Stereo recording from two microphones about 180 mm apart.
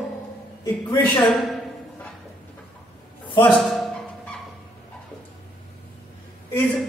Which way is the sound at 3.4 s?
5° left (ahead or behind).